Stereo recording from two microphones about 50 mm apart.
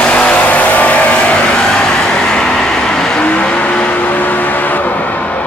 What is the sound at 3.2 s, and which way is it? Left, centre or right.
Vehicle, left.